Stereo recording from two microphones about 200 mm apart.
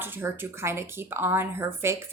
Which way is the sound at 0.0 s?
10° right (ahead or behind).